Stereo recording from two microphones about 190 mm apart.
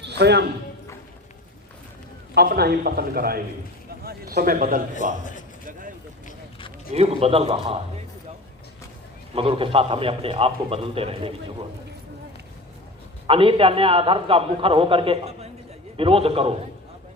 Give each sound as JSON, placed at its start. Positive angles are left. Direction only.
{"t": 0.0, "sound": "a sound", "side_deg": -60}
{"t": 2.3, "sound": "a man's voice", "side_deg": -55}
{"t": 6.9, "sound": "a man's voice", "side_deg": -30}
{"t": 9.3, "sound": "a man's voice", "side_deg": -30}
{"t": 13.2, "sound": "a man's voice", "side_deg": -30}